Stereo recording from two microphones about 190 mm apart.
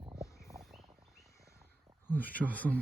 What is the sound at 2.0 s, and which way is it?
Speech, 10° left (ahead or behind).